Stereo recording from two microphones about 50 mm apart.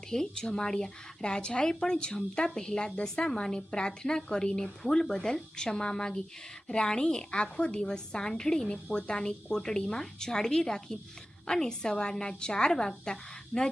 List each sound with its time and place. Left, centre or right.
0.1 s a woman's voice: centre